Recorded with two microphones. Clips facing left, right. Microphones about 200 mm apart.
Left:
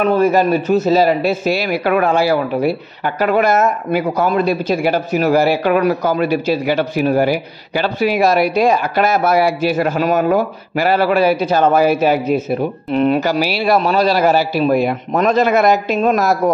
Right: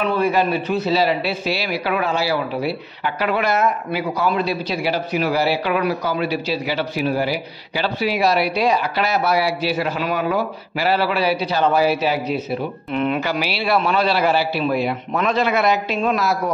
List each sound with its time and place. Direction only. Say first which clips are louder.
0.0 s speech: left 5 dB; 45° left (ahead or behind)